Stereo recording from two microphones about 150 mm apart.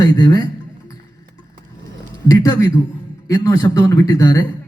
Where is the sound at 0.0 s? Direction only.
25° left (ahead or behind).